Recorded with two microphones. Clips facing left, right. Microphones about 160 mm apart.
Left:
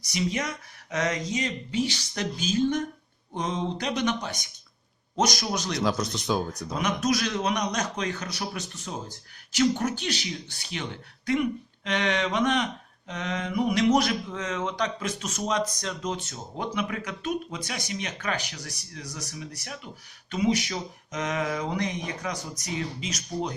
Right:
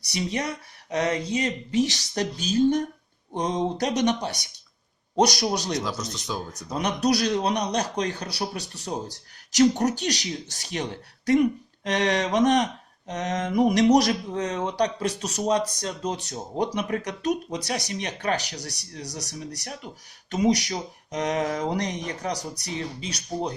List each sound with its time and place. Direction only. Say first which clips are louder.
0.1 s speech: right 1 dB; 35° right (ahead or behind)
5.8 s speech: left 5 dB; 60° left (ahead or behind)
6.7 s speech: right 3 dB; 35° right (ahead or behind)